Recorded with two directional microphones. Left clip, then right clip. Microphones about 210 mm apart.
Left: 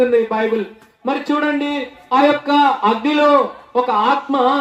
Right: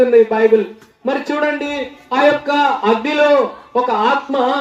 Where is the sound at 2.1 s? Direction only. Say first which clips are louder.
Even; 40° left (ahead or behind).